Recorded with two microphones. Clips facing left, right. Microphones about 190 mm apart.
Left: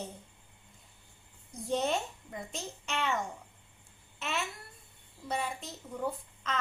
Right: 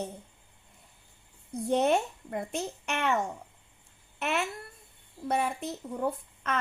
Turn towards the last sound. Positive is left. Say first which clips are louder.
# right 4 dB
turn(degrees=-60)  # may be behind; listen again after turning